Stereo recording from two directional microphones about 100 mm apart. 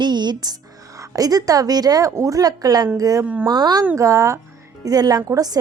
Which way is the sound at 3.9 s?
30° right (ahead or behind).